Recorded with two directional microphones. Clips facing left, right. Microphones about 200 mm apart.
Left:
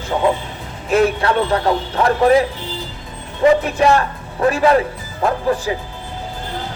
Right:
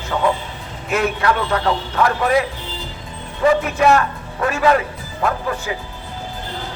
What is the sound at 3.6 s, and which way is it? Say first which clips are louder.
Speech: even; 35° left (ahead or behind).